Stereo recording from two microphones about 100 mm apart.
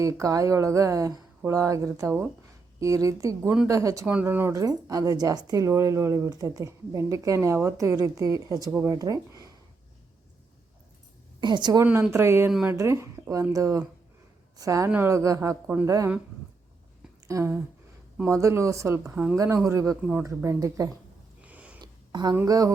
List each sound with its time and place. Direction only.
0.0 s speech: 35° right (ahead or behind)
4.0 s a woman's voice: 15° right (ahead or behind)
4.5 s speech: 40° right (ahead or behind)
11.3 s a woman's voice: 50° right (ahead or behind)
12.1 s a woman's voice: 25° right (ahead or behind)
15.6 s a woman's voice: 15° right (ahead or behind)
17.2 s speech: 30° right (ahead or behind)
19.1 s a woman's voice: 15° right (ahead or behind)
19.6 s speech: 30° right (ahead or behind)
20.0 s a woman's voice: 10° right (ahead or behind)
20.2 s speech: 30° right (ahead or behind)
21.4 s a sound: 15° right (ahead or behind)
21.8 s a sound: 45° right (ahead or behind)
22.4 s speech: 40° right (ahead or behind)